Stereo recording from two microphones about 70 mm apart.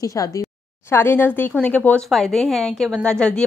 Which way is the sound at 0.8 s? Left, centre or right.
Left.